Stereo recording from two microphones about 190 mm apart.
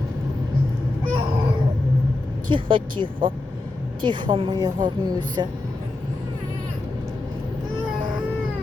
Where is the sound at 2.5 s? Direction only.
25° right (ahead or behind).